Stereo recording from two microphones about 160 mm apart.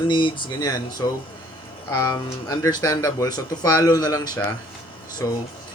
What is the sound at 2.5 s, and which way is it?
A man's voice, 25° left (ahead or behind).